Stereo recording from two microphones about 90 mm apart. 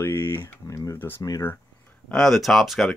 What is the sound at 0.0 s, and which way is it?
Speech, 25° left (ahead or behind).